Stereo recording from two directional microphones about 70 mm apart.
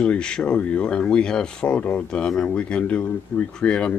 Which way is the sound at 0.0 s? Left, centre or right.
Centre.